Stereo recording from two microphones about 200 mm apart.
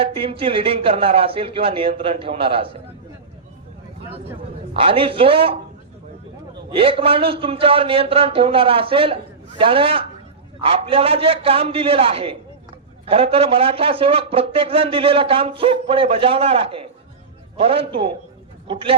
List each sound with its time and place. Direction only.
0.0 s speech: 25° right (ahead or behind)
4.7 s speech: 25° right (ahead or behind)
6.7 s speech: 25° right (ahead or behind)